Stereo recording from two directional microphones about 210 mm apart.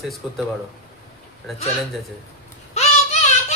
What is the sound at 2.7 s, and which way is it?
Child singing, 35° left (ahead or behind).